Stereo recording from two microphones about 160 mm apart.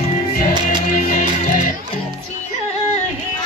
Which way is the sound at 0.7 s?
55° left (ahead or behind).